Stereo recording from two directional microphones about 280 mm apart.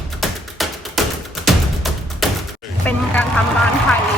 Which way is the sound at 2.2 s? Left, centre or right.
Centre.